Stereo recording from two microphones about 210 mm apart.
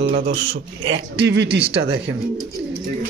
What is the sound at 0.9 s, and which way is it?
A man's voice, 55° right (ahead or behind).